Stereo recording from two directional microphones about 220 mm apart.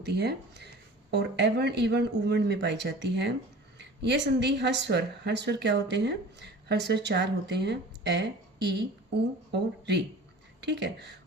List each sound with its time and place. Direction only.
0.0 s a woman's voice: 50° right (ahead or behind)